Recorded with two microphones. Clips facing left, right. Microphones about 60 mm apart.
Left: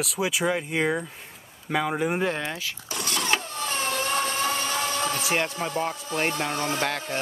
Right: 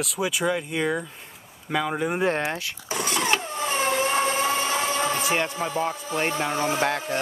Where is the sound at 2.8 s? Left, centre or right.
Right.